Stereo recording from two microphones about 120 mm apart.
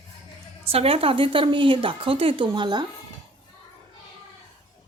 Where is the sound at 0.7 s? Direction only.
55° right (ahead or behind).